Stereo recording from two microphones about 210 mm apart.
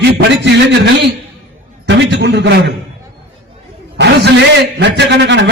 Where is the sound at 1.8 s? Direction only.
55° right (ahead or behind).